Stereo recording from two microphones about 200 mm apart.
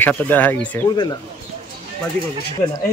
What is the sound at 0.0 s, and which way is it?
Speech, 10° left (ahead or behind).